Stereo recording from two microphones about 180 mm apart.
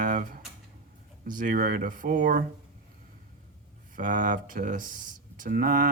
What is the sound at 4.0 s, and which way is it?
Speech, 50° right (ahead or behind).